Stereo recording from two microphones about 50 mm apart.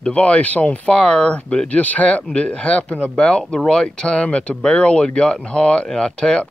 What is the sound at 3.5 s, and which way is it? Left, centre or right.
Speech, centre.